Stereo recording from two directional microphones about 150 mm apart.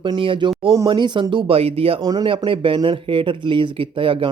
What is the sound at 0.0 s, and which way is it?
Speech, 35° right (ahead or behind).